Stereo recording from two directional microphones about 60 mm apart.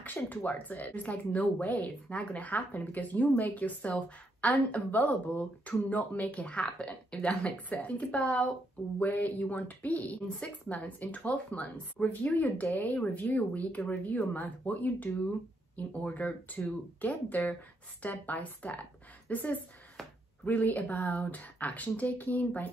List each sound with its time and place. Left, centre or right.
0.0 s a woman's voice: left